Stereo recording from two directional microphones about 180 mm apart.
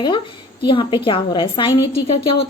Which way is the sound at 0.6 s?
25° left (ahead or behind).